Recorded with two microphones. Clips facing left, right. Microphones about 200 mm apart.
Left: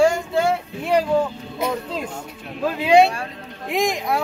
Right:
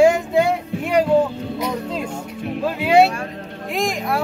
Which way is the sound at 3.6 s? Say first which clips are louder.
Left 1 dB; centre (ahead or behind).